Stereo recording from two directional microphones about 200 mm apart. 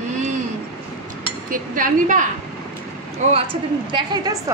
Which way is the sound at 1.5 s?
40° right (ahead or behind).